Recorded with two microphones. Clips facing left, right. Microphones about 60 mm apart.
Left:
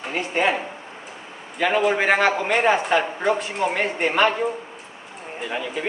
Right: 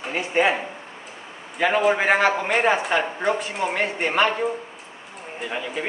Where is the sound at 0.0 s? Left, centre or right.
Centre.